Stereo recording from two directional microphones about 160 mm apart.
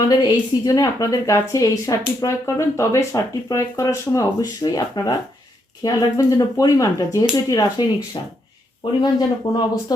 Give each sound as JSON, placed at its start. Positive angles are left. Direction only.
{"t": 0.1, "sound": "a woman's voice", "side_deg": 25}